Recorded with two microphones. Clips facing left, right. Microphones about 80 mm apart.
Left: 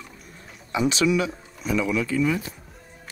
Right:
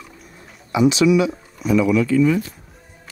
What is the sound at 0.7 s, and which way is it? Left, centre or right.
Speech, centre.